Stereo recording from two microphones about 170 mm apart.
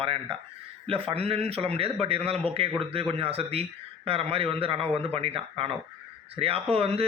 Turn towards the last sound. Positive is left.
turn(degrees=-35)  # may be behind; listen again after turning